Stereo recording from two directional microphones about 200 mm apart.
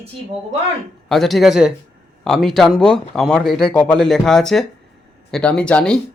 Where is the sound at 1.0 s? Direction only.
Centre (ahead or behind).